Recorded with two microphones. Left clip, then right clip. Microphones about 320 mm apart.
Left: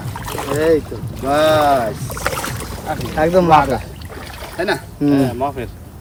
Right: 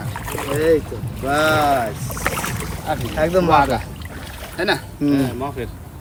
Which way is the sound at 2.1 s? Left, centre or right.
Centre.